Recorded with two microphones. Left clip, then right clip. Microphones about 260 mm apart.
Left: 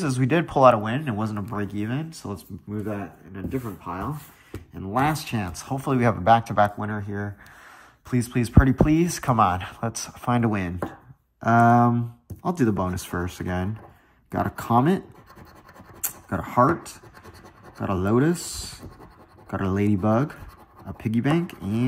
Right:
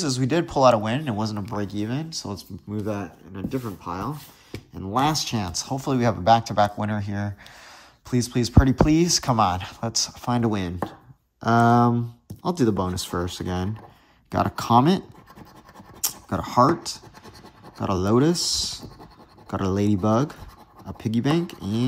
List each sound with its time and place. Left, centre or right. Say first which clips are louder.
0.0 s speech: even; centre
6.9 s speech: right 1 dB; right
8.1 s speech: right 1 dB; centre
16.3 s speech: right 1 dB; centre
17.7 s speech: right 2 dB; centre